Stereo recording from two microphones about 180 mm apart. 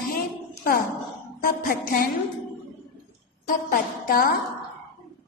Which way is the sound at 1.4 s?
55° left (ahead or behind).